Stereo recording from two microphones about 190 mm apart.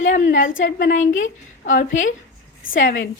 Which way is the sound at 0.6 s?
45° left (ahead or behind).